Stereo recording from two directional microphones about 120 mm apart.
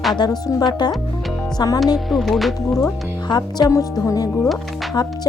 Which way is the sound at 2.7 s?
30° left (ahead or behind).